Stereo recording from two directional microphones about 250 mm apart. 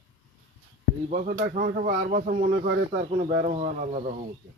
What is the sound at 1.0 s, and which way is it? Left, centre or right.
Speech, right.